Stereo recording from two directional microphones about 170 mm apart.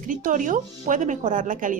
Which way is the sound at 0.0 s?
50° right (ahead or behind).